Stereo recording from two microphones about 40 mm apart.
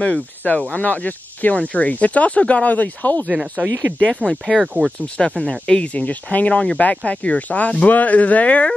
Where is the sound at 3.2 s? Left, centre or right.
Right.